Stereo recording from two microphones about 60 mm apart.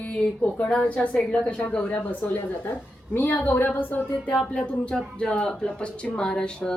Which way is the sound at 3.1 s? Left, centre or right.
Left.